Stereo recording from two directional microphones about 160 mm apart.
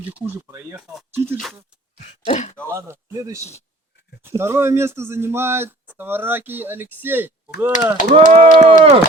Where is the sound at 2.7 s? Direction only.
15° right (ahead or behind).